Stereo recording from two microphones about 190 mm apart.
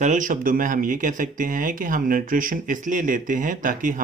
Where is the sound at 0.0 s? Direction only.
40° right (ahead or behind).